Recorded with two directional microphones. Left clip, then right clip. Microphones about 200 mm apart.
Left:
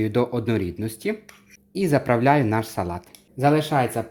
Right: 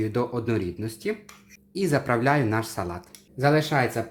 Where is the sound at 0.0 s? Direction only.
35° left (ahead or behind).